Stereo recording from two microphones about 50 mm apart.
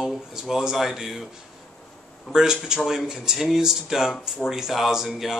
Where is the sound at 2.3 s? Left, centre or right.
Centre.